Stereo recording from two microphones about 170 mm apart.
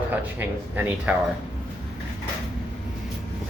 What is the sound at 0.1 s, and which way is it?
Speech, 10° right (ahead or behind).